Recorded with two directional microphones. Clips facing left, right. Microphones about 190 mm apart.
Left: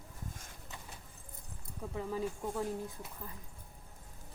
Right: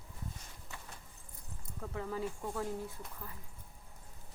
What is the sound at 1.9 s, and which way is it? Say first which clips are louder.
Speech: left 2 dB; 15° left (ahead or behind).